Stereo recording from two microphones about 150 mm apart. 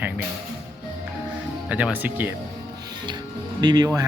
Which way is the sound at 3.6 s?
25° right (ahead or behind).